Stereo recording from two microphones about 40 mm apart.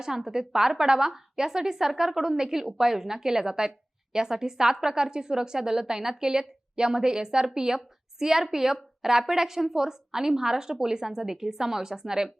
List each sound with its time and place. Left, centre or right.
0.0 s a woman's voice: centre